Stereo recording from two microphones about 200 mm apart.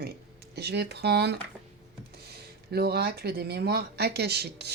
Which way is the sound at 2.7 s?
50° right (ahead or behind).